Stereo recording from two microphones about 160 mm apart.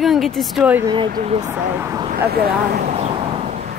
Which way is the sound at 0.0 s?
Centre (ahead or behind).